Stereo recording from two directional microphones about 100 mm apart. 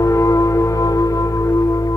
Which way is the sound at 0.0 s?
30° left (ahead or behind).